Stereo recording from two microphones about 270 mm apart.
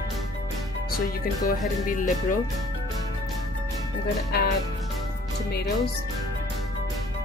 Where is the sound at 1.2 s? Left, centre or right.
Left.